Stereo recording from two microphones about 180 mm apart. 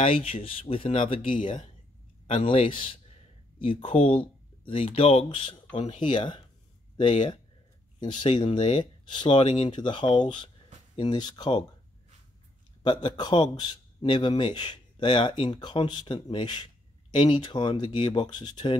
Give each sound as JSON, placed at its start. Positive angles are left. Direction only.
{"t": 0.0, "sound": "speech", "side_deg": 30}
{"t": 2.3, "sound": "a man's voice", "side_deg": 30}
{"t": 12.8, "sound": "a man's voice", "side_deg": 25}